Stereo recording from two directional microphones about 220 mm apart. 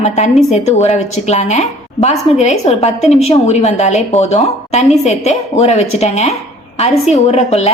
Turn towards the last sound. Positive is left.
turn(degrees=30)  # may be behind; listen again after turning